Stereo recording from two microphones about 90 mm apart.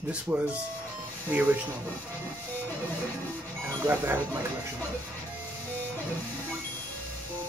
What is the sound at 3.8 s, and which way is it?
Speech, 20° right (ahead or behind).